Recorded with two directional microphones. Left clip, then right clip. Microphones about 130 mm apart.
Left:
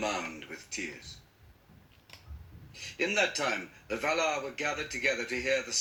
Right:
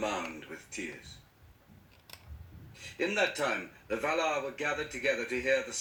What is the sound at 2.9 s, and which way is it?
A man's voice, 25° left (ahead or behind).